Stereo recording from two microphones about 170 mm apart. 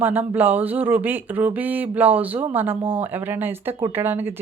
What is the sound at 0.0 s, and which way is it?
Speech, 10° right (ahead or behind).